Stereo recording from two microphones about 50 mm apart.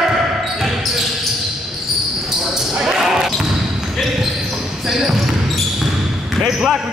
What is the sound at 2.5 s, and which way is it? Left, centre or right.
Basketball bounce, centre.